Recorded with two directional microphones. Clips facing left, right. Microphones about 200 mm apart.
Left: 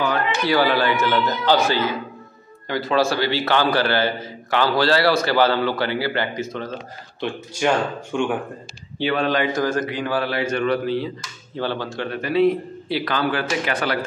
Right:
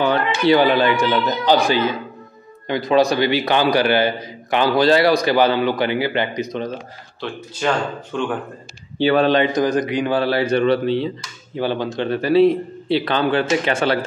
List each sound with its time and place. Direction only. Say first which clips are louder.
0.0 s a man's voice: right 4 dB; 25° right (ahead or behind)
7.2 s speech: left 2 dB; 10° left (ahead or behind)
9.0 s a man's voice: right 6 dB; 40° right (ahead or behind)
9.3 s a man's voice: right 4 dB; 20° right (ahead or behind)
10.2 s a man's voice: right 5 dB; 35° right (ahead or behind)
11.5 s a man's voice: right 4 dB; 15° right (ahead or behind)
12.1 s a man's voice: right 4 dB; 30° right (ahead or behind)